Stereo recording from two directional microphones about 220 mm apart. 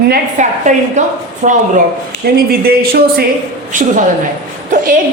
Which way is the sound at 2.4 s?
45° right (ahead or behind).